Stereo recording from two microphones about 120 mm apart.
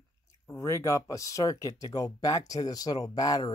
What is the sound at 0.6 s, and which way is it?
Speech, 25° left (ahead or behind).